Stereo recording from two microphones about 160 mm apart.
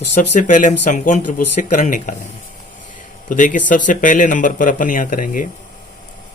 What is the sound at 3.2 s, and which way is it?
A man's voice, 55° left (ahead or behind).